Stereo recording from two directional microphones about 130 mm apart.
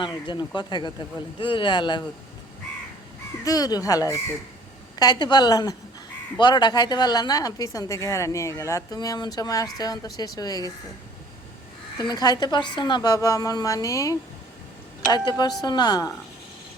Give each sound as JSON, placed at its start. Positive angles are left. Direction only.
{"t": 0.0, "sound": "a woman's voice", "side_deg": 35}
{"t": 3.4, "sound": "a woman's voice", "side_deg": 30}
{"t": 11.9, "sound": "a woman's voice", "side_deg": 30}